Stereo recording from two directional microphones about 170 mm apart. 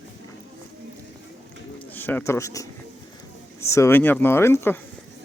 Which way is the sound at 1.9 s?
10° left (ahead or behind).